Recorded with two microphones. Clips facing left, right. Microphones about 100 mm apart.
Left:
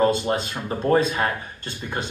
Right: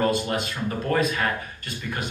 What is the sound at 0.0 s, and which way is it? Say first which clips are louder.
Speech: left 3 dB; 30° left (ahead or behind).